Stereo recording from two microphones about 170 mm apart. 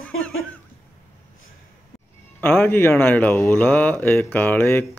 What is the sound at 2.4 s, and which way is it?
Speech, 15° left (ahead or behind).